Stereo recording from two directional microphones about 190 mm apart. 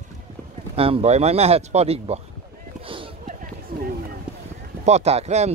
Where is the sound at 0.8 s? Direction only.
30° right (ahead or behind).